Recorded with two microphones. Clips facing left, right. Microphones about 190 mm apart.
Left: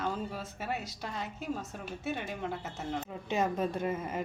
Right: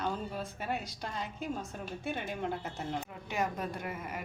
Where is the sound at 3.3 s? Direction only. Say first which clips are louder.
Left 5 dB; 25° left (ahead or behind).